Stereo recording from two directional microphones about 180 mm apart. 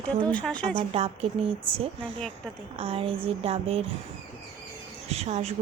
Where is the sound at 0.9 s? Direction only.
35° right (ahead or behind).